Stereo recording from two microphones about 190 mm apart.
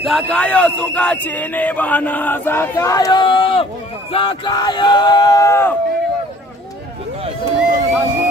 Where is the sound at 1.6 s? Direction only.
10° left (ahead or behind); by 3.6 s 30° left (ahead or behind).